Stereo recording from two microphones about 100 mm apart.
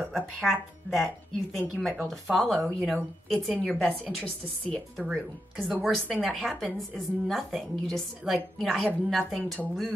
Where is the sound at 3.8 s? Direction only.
15° right (ahead or behind).